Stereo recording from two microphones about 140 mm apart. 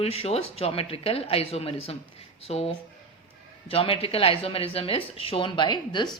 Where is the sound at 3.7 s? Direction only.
40° left (ahead or behind).